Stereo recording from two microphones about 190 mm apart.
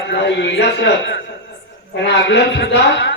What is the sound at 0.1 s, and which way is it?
Speech, 60° left (ahead or behind).